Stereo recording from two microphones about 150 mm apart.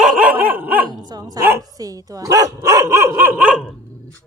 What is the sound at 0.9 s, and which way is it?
Dog, 25° right (ahead or behind).